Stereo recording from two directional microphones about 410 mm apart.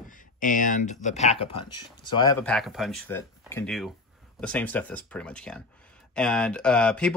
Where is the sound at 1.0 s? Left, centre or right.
Centre.